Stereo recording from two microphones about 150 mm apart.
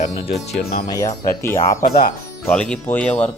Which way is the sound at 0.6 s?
90° left.